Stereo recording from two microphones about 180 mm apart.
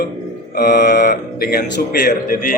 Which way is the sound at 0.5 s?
60° left (ahead or behind).